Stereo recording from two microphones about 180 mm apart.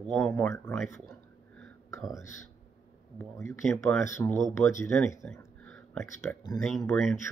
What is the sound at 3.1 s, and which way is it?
Speech, 15° left (ahead or behind).